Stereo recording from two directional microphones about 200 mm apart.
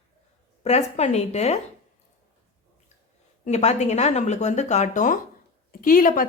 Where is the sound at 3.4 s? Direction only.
35° left (ahead or behind).